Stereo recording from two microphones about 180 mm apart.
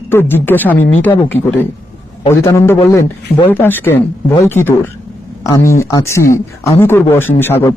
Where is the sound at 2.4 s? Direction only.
15° left (ahead or behind).